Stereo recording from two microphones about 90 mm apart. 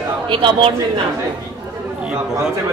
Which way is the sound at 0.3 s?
65° right (ahead or behind).